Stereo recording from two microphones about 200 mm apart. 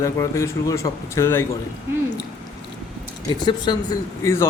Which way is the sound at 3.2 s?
20° left (ahead or behind).